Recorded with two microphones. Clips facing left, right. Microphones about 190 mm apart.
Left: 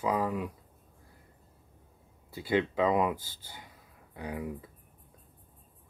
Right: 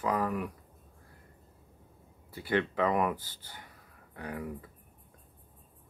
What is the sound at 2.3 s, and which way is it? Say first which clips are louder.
Speech: left 2 dB; 10° left (ahead or behind).